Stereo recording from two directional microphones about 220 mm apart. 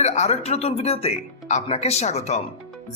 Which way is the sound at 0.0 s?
30° left (ahead or behind).